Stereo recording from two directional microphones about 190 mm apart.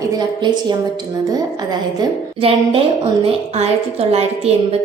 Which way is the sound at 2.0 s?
30° right (ahead or behind).